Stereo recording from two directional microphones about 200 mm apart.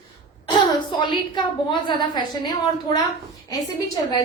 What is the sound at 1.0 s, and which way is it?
A woman's voice, 25° left (ahead or behind).